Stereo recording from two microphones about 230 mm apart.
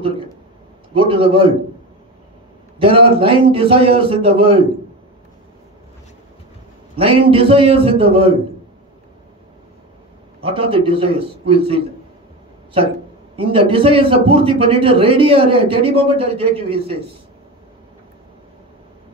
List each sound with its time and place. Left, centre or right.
0.9 s a man's voice: right
2.8 s a man's voice: right
7.0 s a man's voice: right
10.4 s a man's voice: right
13.4 s a man's voice: right